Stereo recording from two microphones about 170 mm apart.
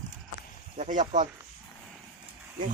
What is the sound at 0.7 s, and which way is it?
Speech, 45° right (ahead or behind).